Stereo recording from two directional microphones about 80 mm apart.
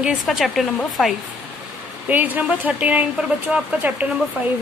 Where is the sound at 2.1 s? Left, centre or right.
Right.